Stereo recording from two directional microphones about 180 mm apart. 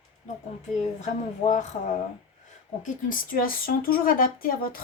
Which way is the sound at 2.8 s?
50° left (ahead or behind).